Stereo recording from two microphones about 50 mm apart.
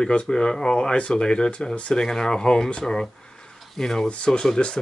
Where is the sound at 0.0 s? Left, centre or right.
Centre.